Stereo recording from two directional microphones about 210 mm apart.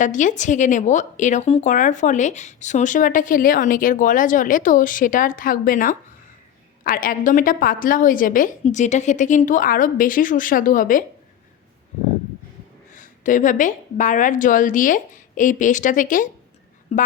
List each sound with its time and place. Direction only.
0.0 s speech: 35° left (ahead or behind)
12.9 s speech: 40° left (ahead or behind)